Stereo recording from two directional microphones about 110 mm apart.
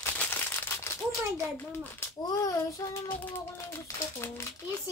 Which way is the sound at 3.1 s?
15° left (ahead or behind).